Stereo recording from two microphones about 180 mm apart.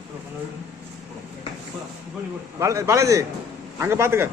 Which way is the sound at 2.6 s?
15° right (ahead or behind).